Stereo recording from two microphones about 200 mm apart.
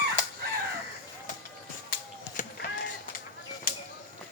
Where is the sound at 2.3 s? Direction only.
40° left (ahead or behind).